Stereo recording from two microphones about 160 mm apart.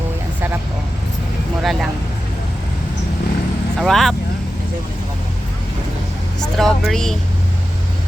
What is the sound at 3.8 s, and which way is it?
Speech, centre (ahead or behind).